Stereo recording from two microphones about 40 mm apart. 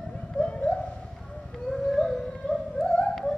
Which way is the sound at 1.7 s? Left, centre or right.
Centre.